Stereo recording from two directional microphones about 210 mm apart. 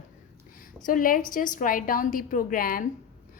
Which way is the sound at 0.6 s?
40° left (ahead or behind).